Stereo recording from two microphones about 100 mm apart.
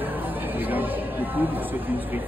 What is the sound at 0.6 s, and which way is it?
Chatter, 20° right (ahead or behind).